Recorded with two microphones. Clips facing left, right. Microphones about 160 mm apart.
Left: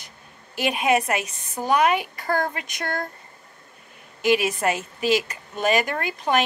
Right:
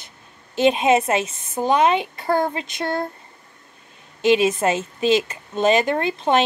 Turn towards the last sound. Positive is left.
turn(degrees=-25)  # may be behind; listen again after turning